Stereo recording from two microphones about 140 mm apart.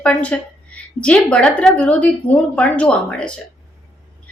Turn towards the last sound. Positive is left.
turn(degrees=5)  # may be behind; listen again after turning